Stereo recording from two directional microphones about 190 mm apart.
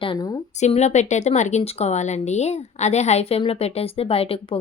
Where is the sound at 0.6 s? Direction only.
35° left (ahead or behind).